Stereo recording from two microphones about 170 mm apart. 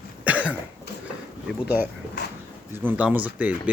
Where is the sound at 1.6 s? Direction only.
10° right (ahead or behind).